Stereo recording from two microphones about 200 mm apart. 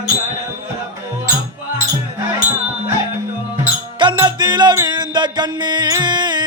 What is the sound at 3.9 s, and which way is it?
Music, 20° right (ahead or behind).